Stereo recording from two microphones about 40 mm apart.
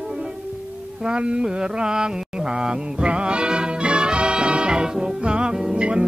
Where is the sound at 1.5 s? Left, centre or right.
Right.